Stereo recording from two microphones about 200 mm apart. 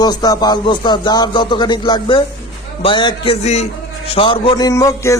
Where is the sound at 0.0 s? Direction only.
20° left (ahead or behind).